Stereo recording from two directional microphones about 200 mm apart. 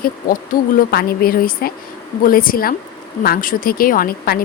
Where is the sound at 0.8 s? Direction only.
50° left (ahead or behind).